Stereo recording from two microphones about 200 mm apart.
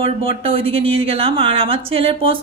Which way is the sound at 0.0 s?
25° right (ahead or behind).